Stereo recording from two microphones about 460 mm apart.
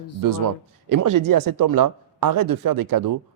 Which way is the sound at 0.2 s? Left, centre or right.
Right.